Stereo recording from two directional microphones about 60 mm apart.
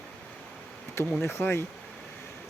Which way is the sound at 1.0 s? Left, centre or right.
Left.